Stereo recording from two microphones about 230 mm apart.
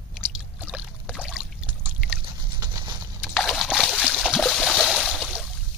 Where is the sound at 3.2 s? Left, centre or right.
Centre.